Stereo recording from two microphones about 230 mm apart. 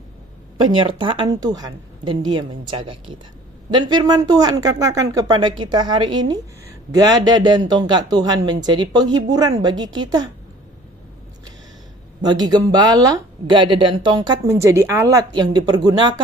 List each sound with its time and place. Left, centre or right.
0.5 s a woman's voice: right
12.2 s speech: centre